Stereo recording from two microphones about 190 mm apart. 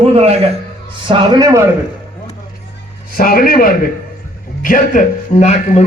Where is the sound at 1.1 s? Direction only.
20° right (ahead or behind).